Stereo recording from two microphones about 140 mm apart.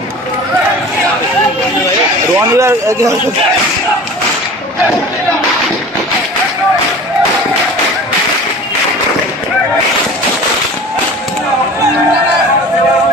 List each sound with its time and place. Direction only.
2.3 s speech: 20° right (ahead or behind)